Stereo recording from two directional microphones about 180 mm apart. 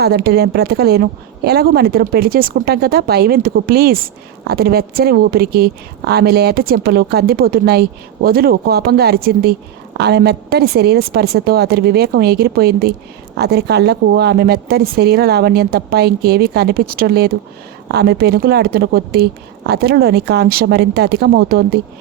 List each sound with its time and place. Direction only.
0.0 s a woman's voice: 60° right (ahead or behind)